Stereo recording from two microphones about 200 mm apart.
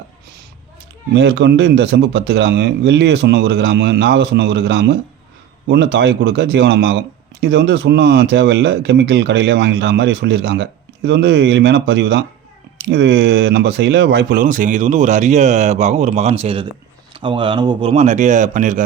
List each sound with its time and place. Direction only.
1.1 s speech: 60° right (ahead or behind); by 18.8 s 40° right (ahead or behind)